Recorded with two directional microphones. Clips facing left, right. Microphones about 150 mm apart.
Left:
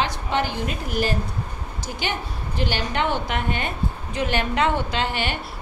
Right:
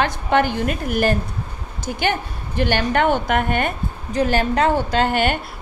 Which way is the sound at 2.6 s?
55° right (ahead or behind).